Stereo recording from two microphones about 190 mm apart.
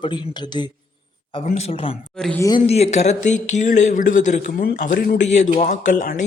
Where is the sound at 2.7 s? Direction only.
35° left (ahead or behind).